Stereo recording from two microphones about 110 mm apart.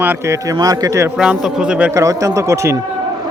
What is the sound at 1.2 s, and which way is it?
Speech, 5° right (ahead or behind).